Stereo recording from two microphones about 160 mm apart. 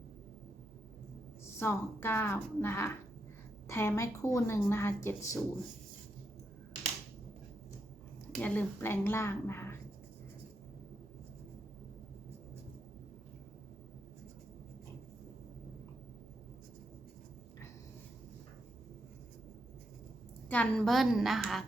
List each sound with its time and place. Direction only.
1.5 s speech: 15° left (ahead or behind)
8.3 s speech: 10° left (ahead or behind)
20.5 s a woman's voice: 5° left (ahead or behind)